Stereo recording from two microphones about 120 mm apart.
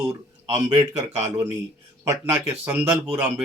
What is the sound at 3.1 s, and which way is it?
Speech, 20° right (ahead or behind).